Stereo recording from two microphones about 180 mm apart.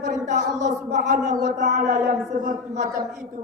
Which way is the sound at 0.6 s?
40° right (ahead or behind).